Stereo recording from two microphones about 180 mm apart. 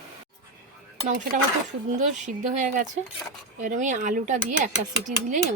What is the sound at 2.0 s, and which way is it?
Speech, 45° right (ahead or behind).